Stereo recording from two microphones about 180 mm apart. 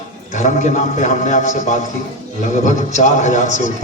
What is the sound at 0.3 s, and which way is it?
A man's voice, 45° left (ahead or behind).